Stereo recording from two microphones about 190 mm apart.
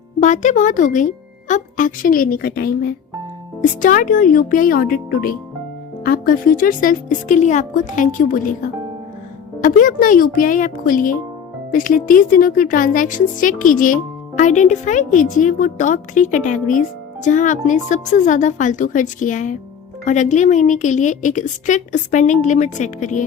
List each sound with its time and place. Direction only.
0.2 s speech: 40° left (ahead or behind)
9.6 s a woman's voice: 45° left (ahead or behind)